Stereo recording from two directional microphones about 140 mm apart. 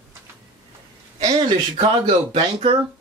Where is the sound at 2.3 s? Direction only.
40° right (ahead or behind).